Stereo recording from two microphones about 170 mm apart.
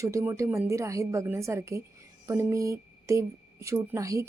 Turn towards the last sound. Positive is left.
turn(degrees=-20)  # may be behind; listen again after turning